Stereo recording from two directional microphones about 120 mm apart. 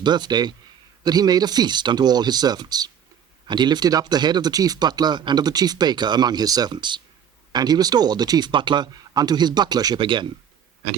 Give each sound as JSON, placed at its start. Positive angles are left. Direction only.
{"t": 0.0, "sound": "speech", "side_deg": -35}